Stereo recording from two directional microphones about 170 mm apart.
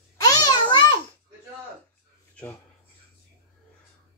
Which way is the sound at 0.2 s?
20° left (ahead or behind).